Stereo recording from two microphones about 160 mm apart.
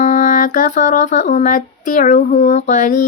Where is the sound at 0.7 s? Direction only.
45° left (ahead or behind).